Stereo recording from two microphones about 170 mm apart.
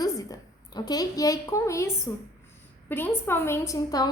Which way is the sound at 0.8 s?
20° left (ahead or behind).